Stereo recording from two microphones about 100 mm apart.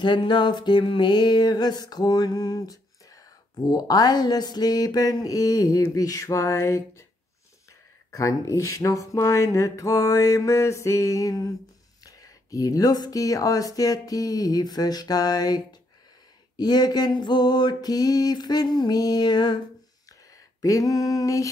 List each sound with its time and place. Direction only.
0.0 s music: 50° left (ahead or behind); by 7.1 s 30° left (ahead or behind)
8.1 s music: 30° left (ahead or behind)
16.5 s a sound: 40° left (ahead or behind)
20.6 s music: 35° left (ahead or behind)